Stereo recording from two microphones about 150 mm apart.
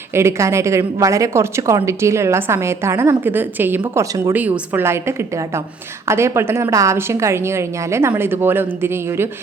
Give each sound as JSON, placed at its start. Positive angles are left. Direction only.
{"t": 0.1, "sound": "a woman's voice", "side_deg": -15}